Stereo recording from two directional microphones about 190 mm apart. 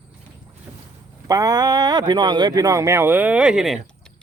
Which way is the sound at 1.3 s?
20° right (ahead or behind).